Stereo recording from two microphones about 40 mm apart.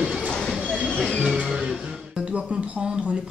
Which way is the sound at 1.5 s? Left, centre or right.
Right.